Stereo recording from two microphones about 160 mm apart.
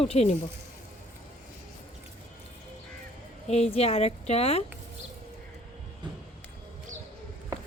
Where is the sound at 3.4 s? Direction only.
40° left (ahead or behind).